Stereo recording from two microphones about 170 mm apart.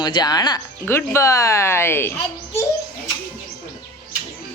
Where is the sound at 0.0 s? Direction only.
25° left (ahead or behind).